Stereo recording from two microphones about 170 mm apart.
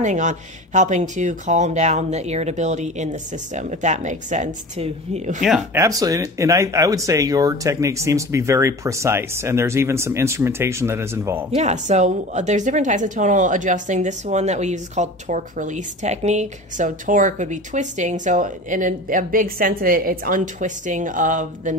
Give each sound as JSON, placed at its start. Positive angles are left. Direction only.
{"t": 0.0, "sound": "a woman's voice", "side_deg": -45}
{"t": 5.8, "sound": "speech", "side_deg": -20}
{"t": 11.5, "sound": "a woman's voice", "side_deg": -40}